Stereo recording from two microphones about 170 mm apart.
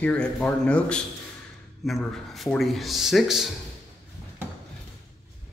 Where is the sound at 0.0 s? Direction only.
5° left (ahead or behind).